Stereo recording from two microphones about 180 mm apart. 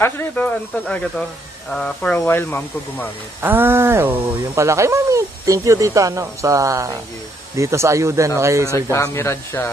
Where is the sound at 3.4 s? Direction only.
10° right (ahead or behind).